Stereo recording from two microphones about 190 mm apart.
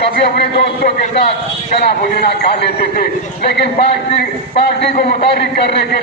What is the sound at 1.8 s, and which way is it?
A man's voice, 60° left (ahead or behind).